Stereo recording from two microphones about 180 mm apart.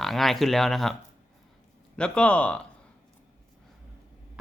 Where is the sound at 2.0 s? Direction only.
5° left (ahead or behind).